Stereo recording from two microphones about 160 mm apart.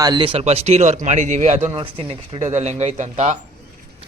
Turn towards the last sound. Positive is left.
turn(degrees=-50)  # may be behind; listen again after turning